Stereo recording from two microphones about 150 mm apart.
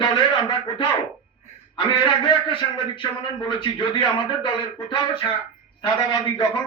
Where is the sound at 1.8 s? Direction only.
35° left (ahead or behind).